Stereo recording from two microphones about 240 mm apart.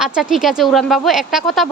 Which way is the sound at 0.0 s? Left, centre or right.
Centre.